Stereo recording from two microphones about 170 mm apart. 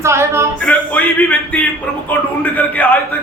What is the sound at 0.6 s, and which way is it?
A man's voice, 10° left (ahead or behind).